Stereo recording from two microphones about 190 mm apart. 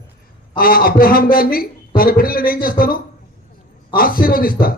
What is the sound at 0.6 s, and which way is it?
A man's voice, 50° left (ahead or behind).